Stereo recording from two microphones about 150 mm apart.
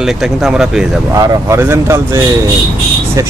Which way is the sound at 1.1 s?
20° right (ahead or behind).